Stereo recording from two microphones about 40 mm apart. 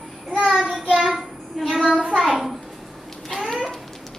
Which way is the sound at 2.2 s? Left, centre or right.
Centre.